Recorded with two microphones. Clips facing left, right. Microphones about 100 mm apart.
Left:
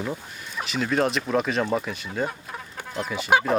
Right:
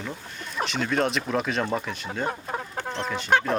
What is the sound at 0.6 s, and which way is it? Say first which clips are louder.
Speech: left 1 dB; centre (ahead or behind).